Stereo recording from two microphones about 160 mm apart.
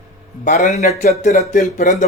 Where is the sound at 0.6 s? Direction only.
45° left (ahead or behind).